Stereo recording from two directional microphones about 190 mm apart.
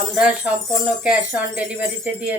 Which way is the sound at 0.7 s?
5° right (ahead or behind).